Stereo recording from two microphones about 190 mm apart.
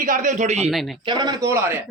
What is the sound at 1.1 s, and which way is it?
Speech, 20° right (ahead or behind).